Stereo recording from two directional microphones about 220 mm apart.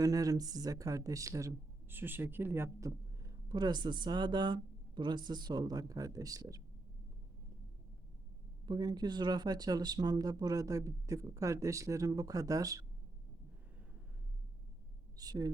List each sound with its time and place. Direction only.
0.0 s speech: 15° right (ahead or behind)
8.6 s speech: 20° right (ahead or behind)
15.1 s a woman's voice: 15° right (ahead or behind)